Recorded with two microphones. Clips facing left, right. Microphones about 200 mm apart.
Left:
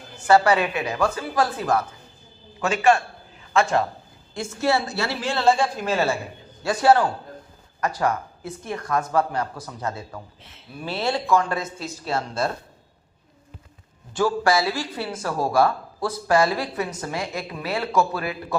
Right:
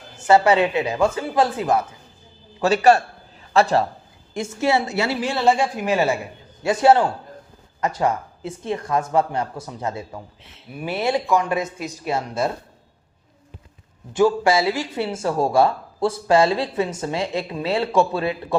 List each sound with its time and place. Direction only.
0.3 s speech: 25° right (ahead or behind)
2.6 s a man's voice: 35° right (ahead or behind)
4.4 s a woman's voice: 15° right (ahead or behind)
14.1 s speech: 20° right (ahead or behind)